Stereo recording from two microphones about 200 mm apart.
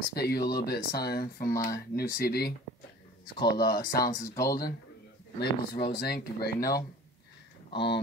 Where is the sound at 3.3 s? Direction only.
20° left (ahead or behind).